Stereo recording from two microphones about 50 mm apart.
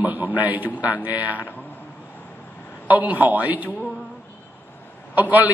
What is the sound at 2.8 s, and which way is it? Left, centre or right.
Speech, right.